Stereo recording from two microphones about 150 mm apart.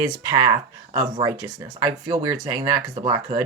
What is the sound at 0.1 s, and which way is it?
Speech, 25° right (ahead or behind).